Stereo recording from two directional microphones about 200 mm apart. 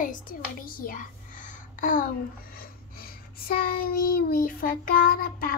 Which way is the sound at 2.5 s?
45° left (ahead or behind).